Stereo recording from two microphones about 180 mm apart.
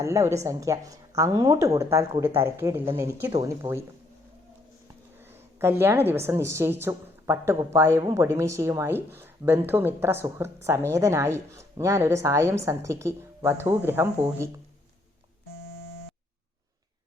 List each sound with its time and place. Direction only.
0.0 s speech: 15° right (ahead or behind)
5.3 s a woman's voice: 15° right (ahead or behind)